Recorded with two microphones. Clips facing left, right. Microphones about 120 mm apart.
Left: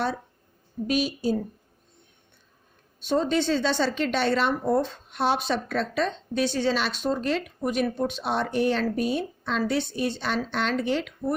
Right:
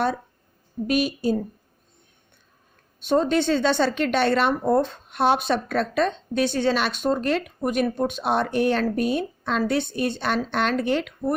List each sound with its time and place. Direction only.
0.9 s speech: 55° right (ahead or behind)
3.0 s speech: 55° right (ahead or behind)